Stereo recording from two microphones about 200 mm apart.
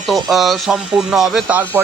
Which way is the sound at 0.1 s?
Centre (ahead or behind).